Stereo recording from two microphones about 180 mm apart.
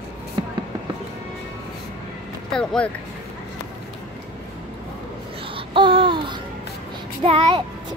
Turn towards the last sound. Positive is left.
turn(degrees=-30)  # may be behind; listen again after turning